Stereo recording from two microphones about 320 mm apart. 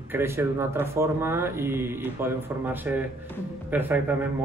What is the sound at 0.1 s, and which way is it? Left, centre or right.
A man's voice, centre.